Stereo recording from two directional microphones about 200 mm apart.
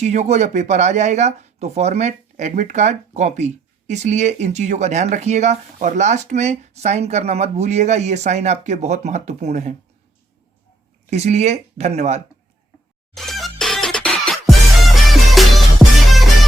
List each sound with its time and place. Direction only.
0.0 s speech: 35° right (ahead or behind)
11.1 s speech: 35° right (ahead or behind)
13.1 s music: centre (ahead or behind)